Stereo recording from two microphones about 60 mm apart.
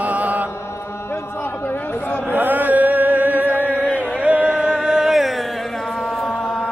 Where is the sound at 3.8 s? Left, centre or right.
Left.